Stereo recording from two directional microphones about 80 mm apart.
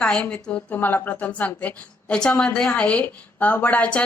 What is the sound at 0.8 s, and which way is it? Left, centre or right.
A woman's voice, left.